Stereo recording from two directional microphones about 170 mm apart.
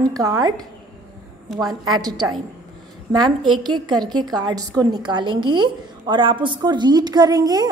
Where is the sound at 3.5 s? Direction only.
25° right (ahead or behind).